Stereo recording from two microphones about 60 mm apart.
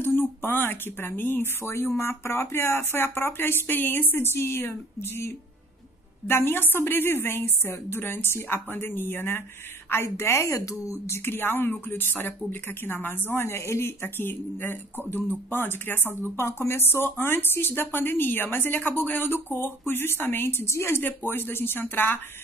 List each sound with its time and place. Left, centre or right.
0.0 s a woman's voice: left
11.1 s speech: left